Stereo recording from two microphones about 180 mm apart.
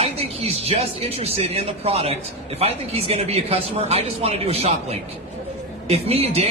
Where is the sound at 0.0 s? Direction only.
35° right (ahead or behind).